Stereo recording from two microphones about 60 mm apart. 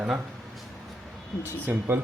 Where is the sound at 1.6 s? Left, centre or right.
Right.